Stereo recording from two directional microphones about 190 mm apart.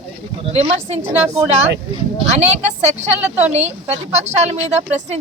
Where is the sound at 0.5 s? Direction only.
35° right (ahead or behind).